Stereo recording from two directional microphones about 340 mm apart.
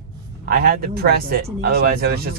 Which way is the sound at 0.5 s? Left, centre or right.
Right.